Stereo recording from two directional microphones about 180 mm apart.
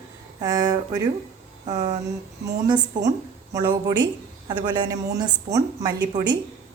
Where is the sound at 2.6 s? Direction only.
25° right (ahead or behind).